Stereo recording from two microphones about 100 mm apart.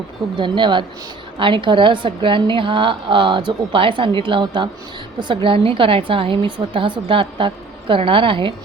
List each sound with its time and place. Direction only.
0.3 s a woman's voice: 55° right (ahead or behind)